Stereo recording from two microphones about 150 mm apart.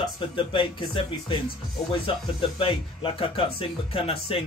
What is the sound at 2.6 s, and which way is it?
Speech, 35° left (ahead or behind).